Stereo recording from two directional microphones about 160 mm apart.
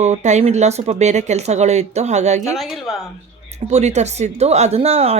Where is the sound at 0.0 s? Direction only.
45° right (ahead or behind).